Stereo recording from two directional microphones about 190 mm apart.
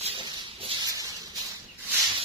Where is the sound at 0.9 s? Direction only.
20° right (ahead or behind).